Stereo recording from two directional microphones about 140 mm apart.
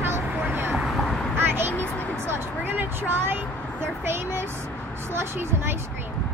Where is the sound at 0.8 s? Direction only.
Centre (ahead or behind).